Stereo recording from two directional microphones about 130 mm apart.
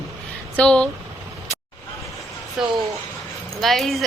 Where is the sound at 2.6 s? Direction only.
5° right (ahead or behind).